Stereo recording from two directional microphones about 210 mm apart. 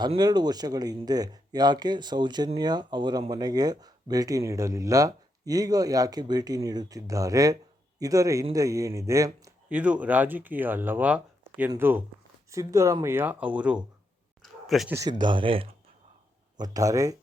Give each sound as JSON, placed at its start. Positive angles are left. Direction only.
{"t": 0.0, "sound": "speech", "side_deg": -20}
{"t": 14.4, "sound": "a sound", "side_deg": 0}
{"t": 14.9, "sound": "speech", "side_deg": -20}